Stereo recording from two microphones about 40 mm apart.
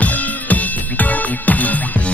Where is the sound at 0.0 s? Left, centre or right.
Left.